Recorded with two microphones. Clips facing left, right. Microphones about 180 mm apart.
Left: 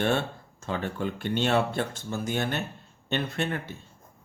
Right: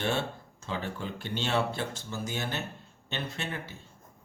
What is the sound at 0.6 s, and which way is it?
Speech, 55° left (ahead or behind).